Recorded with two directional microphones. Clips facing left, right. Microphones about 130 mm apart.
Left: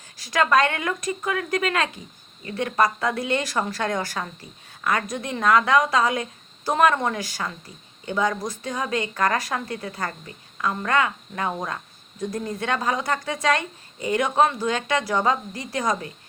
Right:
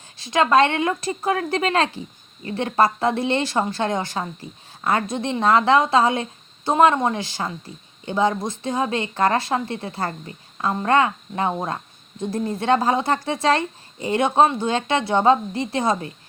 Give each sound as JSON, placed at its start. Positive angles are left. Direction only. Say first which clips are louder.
{"t": 0.2, "sound": "speech", "louder": "right 3 dB", "side_deg": -25}